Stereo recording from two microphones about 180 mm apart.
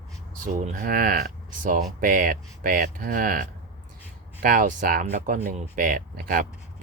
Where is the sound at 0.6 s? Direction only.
50° right (ahead or behind).